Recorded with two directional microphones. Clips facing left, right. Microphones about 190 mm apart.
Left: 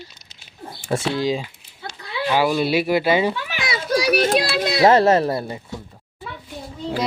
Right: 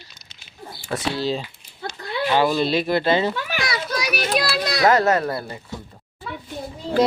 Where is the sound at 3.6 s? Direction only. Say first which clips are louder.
Left 8 dB; 30° left (ahead or behind).